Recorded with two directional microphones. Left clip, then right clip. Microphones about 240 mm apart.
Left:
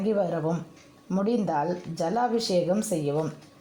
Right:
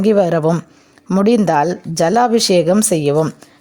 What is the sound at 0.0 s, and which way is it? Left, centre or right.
Speech, right.